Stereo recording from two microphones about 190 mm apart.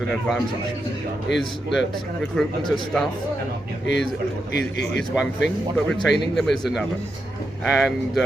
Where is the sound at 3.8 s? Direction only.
70° left (ahead or behind).